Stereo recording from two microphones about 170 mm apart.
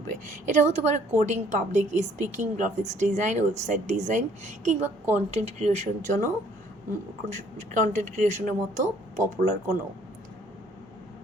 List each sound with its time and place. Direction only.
0.1 s a woman's voice: 45° right (ahead or behind)
7.3 s a woman's voice: 45° right (ahead or behind)